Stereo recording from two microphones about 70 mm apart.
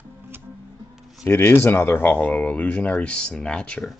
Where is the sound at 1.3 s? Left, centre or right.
Left; by 3.8 s centre.